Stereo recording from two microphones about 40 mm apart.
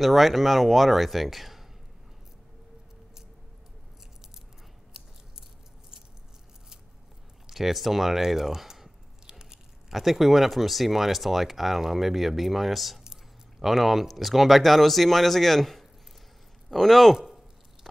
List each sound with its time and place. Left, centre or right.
0.0 s speech: centre
7.4 s speech: centre
9.2 s biting: centre
9.9 s speech: centre
13.0 s a sound: centre
13.7 s speech: centre